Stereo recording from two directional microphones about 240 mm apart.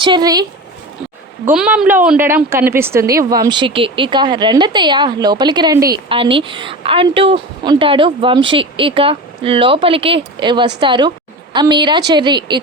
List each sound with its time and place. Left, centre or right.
0.0 s a woman's voice: centre
1.5 s a woman's voice: centre